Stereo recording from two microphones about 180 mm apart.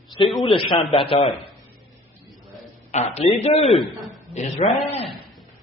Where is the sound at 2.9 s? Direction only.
35° left (ahead or behind).